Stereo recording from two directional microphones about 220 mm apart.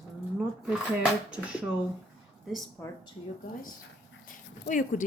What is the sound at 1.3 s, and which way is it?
Speech, 5° right (ahead or behind).